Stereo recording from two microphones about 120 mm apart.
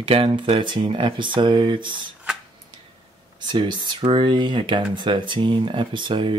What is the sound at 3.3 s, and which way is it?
Speech, 40° right (ahead or behind).